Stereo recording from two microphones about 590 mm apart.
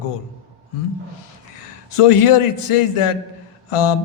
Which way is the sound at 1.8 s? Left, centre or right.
Left.